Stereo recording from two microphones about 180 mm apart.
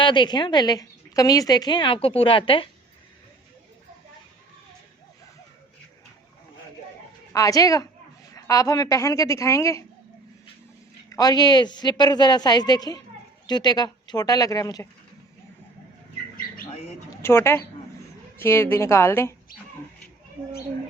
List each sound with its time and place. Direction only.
0.0 s a woman's voice: 25° left (ahead or behind)
7.3 s a woman's voice: 20° left (ahead or behind)
11.1 s a woman's voice: 20° left (ahead or behind)
17.2 s a woman's voice: 15° left (ahead or behind)